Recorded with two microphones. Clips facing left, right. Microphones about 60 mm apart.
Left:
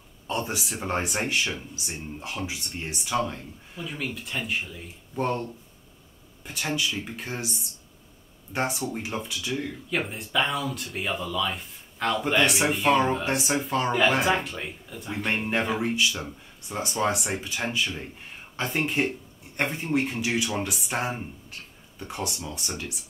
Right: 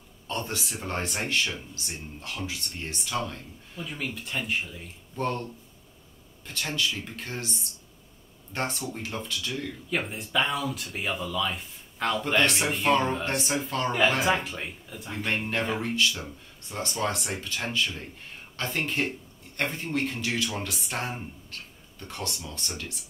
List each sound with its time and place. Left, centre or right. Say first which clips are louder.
0.3 s speech: left 3 dB; centre
5.1 s speech: left 3 dB; centre
8.5 s speech: left 3 dB; centre
9.8 s speech: right 1 dB; centre